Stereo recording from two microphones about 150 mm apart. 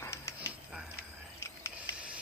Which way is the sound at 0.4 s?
5° right (ahead or behind).